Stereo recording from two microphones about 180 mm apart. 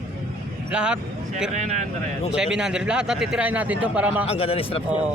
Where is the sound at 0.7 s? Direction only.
5° right (ahead or behind).